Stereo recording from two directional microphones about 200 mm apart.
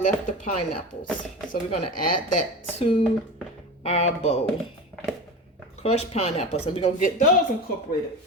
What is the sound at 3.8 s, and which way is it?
Speech, 30° left (ahead or behind).